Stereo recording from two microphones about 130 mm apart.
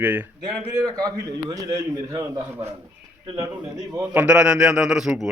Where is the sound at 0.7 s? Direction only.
30° right (ahead or behind).